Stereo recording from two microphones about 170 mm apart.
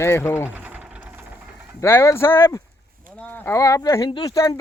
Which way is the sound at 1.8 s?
15° left (ahead or behind).